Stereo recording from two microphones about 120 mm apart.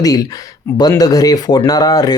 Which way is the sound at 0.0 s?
30° left (ahead or behind).